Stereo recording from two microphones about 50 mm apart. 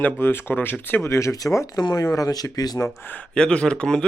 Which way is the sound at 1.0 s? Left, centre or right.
Left.